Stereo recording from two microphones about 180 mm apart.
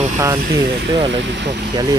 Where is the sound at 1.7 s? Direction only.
20° right (ahead or behind).